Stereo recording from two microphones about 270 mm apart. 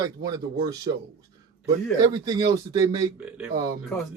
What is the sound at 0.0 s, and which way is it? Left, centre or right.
Speech, centre.